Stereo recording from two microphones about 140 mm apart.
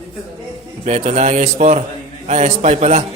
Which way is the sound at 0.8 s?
55° right (ahead or behind).